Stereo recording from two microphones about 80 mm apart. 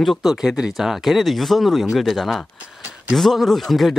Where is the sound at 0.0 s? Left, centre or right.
Centre.